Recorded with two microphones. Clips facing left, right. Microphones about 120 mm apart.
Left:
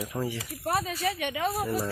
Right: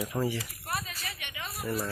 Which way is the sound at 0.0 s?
5° right (ahead or behind).